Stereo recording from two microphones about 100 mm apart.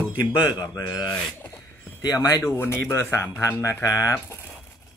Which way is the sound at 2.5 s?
25° left (ahead or behind).